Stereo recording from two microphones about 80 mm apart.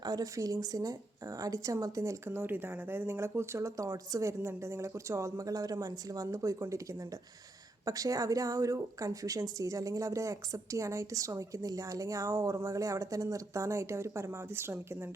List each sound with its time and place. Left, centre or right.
0.0 s speech: right
7.9 s speech: right